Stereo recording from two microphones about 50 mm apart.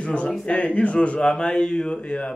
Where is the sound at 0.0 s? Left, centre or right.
Left.